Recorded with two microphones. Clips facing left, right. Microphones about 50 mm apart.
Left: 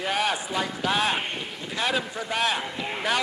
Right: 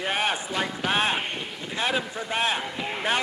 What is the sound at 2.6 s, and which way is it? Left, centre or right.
Speech, centre.